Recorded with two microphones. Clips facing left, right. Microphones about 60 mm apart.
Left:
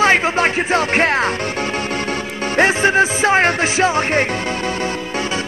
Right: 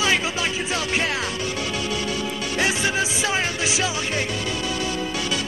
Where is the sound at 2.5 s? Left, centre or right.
Left.